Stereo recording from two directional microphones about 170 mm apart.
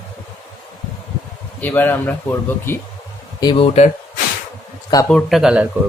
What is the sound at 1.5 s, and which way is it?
Speech, 10° left (ahead or behind).